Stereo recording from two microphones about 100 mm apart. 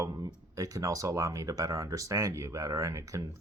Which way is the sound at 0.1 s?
45° right (ahead or behind).